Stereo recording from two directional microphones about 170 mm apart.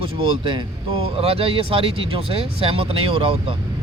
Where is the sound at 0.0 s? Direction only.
30° right (ahead or behind).